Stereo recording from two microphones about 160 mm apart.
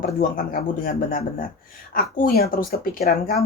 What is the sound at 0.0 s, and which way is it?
Speech, 60° left (ahead or behind).